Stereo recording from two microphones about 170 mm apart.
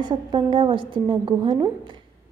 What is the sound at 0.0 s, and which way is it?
A woman's voice, 25° right (ahead or behind).